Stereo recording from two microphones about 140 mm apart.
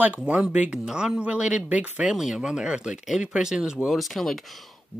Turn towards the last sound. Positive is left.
turn(degrees=0)  # may be behind; listen again after turning